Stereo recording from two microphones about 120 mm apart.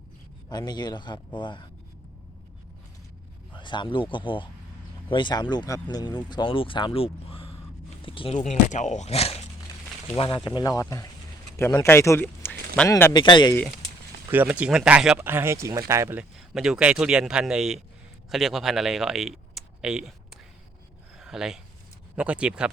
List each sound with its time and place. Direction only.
0.5 s speech: 35° left (ahead or behind)
3.5 s speech: 40° left (ahead or behind)
8.7 s speech: 85° left; by 9.4 s 60° left (ahead or behind)
10.2 s speech: 40° left (ahead or behind); by 13.1 s 20° left (ahead or behind)
13.1 s speech: 40° left (ahead or behind)
14.3 s speech: 15° right (ahead or behind)
15.2 s speech: 20° right (ahead or behind)
16.1 s speech: 5° right (ahead or behind)